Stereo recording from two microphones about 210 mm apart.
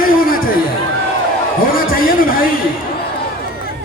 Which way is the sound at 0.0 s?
40° left (ahead or behind).